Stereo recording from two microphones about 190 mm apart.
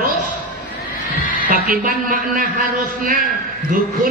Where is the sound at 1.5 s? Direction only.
45° right (ahead or behind).